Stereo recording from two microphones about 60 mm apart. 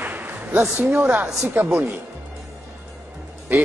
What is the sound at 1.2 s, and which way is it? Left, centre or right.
Speech, right.